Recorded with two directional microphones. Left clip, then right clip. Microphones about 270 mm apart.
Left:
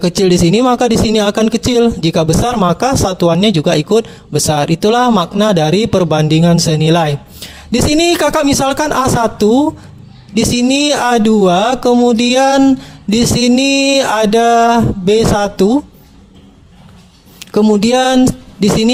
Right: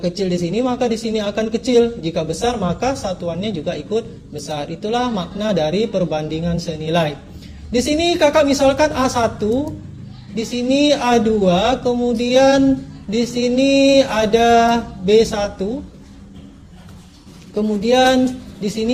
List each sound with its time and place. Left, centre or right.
0.0 s a man's voice: left
17.5 s a man's voice: left